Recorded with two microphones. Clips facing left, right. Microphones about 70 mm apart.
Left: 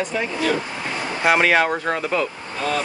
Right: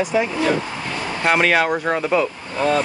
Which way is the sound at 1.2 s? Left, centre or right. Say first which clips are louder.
Even; centre.